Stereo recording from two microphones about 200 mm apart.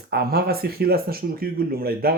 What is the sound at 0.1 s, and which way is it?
Speech, 50° right (ahead or behind).